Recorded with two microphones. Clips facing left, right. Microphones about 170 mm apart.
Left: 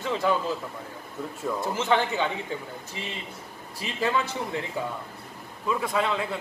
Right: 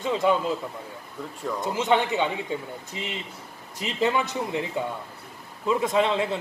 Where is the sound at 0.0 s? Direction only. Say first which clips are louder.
Right 3 dB; 20° right (ahead or behind).